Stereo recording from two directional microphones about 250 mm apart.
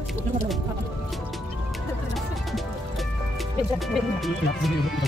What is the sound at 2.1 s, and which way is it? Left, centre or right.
Music, centre.